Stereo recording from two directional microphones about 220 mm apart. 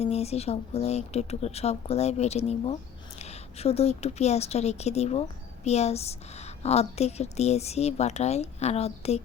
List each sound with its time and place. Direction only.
0.0 s a woman's voice: 30° left (ahead or behind)